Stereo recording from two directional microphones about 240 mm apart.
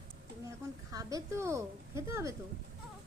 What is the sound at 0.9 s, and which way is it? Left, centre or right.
A woman's voice, centre.